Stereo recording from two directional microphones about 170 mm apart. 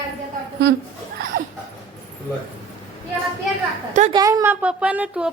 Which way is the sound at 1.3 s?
65° right (ahead or behind).